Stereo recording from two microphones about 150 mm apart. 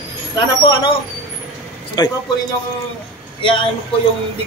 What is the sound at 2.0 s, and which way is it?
Speech, 25° left (ahead or behind).